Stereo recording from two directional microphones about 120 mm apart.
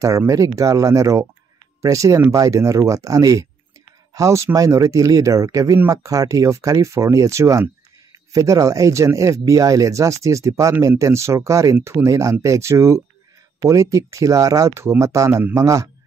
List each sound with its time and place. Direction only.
0.3 s speech: 25° right (ahead or behind)